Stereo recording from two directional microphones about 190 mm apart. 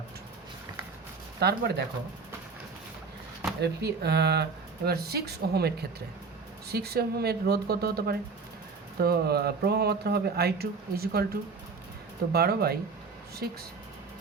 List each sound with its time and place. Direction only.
1.4 s speech: 60° right (ahead or behind)
3.6 s speech: 60° right (ahead or behind)
12.3 s speech: 55° right (ahead or behind)